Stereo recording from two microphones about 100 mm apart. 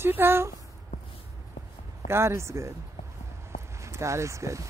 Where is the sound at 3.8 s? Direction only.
30° right (ahead or behind).